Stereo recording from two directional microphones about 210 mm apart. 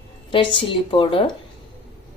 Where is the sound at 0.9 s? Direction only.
25° left (ahead or behind).